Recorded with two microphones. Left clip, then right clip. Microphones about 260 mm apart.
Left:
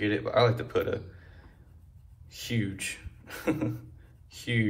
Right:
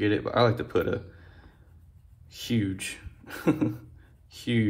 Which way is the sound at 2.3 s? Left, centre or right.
Right.